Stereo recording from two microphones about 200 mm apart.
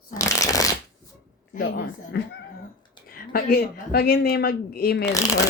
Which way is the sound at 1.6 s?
55° left (ahead or behind).